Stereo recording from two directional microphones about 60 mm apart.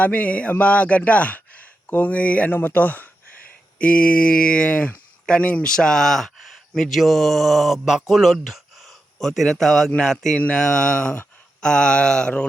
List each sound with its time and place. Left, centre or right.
0.0 s speech: left; by 10.3 s centre
10.3 s speech: centre